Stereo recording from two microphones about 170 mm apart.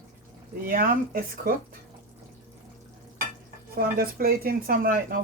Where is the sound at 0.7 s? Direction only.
55° right (ahead or behind).